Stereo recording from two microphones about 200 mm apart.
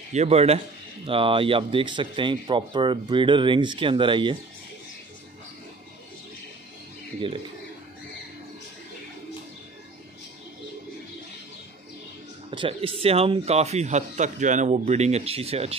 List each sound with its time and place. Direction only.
0.1 s speech: 30° right (ahead or behind)
12.4 s speech: 25° right (ahead or behind)